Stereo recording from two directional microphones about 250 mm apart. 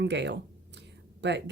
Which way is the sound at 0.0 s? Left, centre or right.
Right.